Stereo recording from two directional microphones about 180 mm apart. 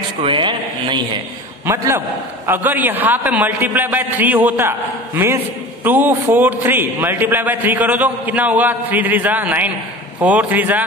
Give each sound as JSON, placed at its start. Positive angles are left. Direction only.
{"t": 0.2, "sound": "speech", "side_deg": -30}
{"t": 1.7, "sound": "a man's voice", "side_deg": -15}